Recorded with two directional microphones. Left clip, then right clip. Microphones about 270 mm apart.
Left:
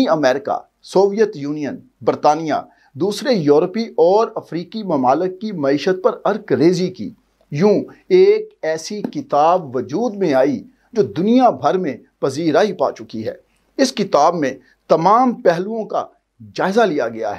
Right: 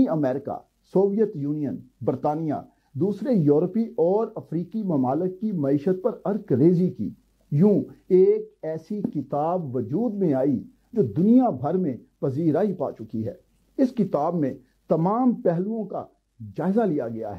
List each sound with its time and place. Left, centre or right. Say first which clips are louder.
0.0 s speech: left 9 dB; centre
0.4 s speech: left 11 dB; centre
2.6 s speech: left 6 dB; centre
3.4 s speech: left 7 dB; centre